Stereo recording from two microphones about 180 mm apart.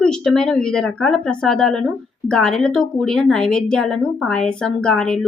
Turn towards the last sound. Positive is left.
turn(degrees=5)  # may be behind; listen again after turning